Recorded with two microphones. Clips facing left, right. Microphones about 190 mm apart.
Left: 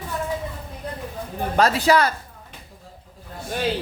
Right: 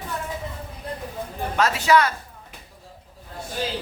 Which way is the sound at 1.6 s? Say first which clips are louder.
Left 1 dB; 35° left (ahead or behind).